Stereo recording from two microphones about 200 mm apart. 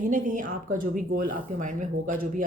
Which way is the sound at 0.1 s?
40° right (ahead or behind).